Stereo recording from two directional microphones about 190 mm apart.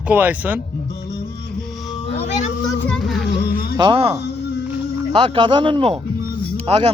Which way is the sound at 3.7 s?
25° right (ahead or behind).